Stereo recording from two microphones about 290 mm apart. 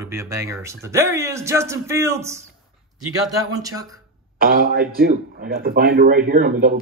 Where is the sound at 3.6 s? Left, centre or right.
Centre.